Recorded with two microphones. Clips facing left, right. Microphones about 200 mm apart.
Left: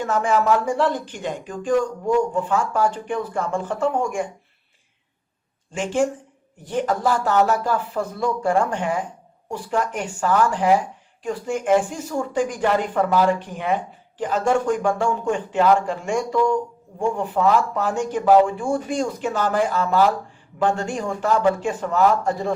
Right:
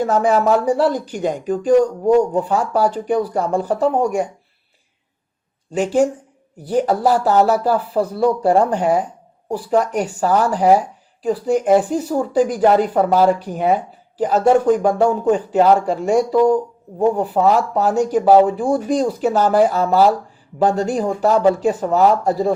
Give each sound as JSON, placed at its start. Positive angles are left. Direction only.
{"t": 0.0, "sound": "speech", "side_deg": -40}
{"t": 5.7, "sound": "speech", "side_deg": -40}